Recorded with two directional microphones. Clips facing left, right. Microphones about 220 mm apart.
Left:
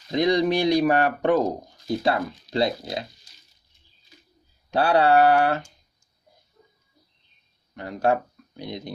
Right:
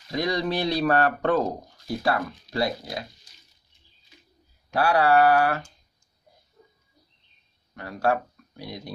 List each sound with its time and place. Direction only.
0.1 s speech: 20° left (ahead or behind)
4.6 s mantra: 25° left (ahead or behind)
7.7 s speech: 20° left (ahead or behind)